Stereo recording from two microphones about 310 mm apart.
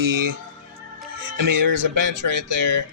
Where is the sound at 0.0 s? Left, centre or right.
Right.